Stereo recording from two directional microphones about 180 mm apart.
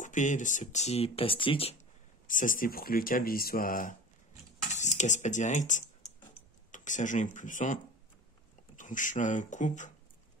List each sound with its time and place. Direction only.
0.0 s speech: 45° left (ahead or behind)
2.2 s speech: 45° left (ahead or behind)